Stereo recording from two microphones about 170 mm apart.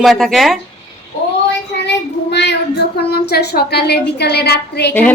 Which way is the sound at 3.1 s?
70° left (ahead or behind).